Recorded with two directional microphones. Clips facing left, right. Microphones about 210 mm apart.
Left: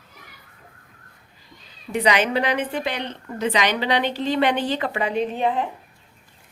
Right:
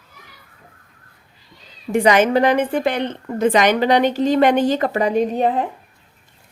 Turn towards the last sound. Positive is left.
turn(degrees=-40)  # may be behind; listen again after turning